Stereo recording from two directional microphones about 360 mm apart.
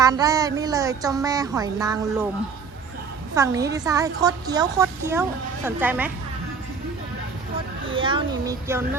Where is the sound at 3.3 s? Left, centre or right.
Centre.